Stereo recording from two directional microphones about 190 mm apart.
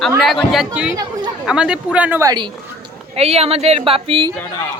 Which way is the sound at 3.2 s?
30° right (ahead or behind).